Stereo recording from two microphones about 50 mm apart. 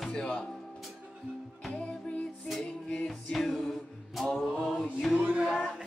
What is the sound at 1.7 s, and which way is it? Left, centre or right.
Music, centre.